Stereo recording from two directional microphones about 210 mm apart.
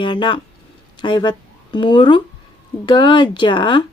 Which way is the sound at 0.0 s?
20° left (ahead or behind).